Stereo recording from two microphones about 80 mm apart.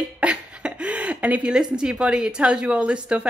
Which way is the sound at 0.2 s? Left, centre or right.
Centre.